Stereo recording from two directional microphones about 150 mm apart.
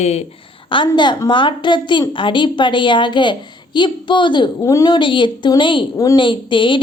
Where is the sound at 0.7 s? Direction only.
30° left (ahead or behind).